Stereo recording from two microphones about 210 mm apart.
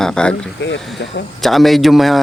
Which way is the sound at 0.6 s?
55° left (ahead or behind).